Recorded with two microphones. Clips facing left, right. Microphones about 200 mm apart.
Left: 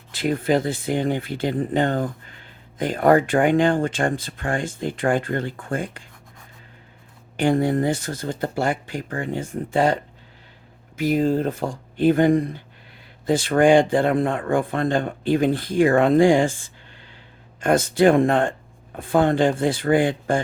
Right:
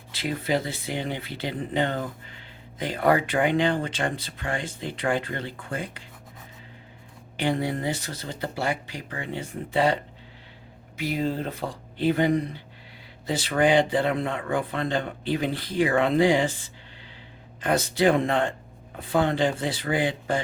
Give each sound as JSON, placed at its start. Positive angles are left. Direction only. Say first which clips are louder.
{"t": 0.1, "sound": "speech", "louder": "left 6 dB", "side_deg": 50}
{"t": 7.3, "sound": "speech", "louder": "left 7 dB", "side_deg": 50}